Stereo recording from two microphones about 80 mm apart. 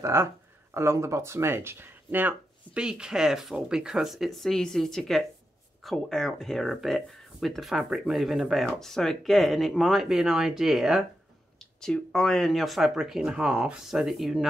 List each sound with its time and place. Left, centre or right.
0.0 s speech: right
2.8 s speech: centre
11.8 s speech: centre